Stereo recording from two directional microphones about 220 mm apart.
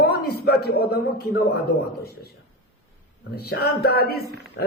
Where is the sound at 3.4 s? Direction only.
45° left (ahead or behind).